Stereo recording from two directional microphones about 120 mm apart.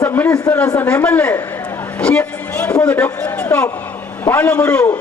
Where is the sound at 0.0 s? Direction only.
15° left (ahead or behind).